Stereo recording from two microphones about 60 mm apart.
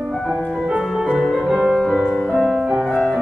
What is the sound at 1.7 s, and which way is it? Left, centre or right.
Music, centre.